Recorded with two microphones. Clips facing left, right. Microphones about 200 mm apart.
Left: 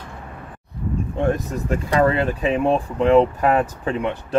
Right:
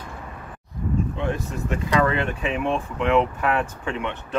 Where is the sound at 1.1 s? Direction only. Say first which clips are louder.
Left 5 dB; 45° left (ahead or behind).